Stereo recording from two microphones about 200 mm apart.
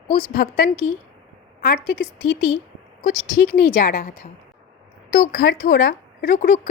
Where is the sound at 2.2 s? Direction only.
90° left.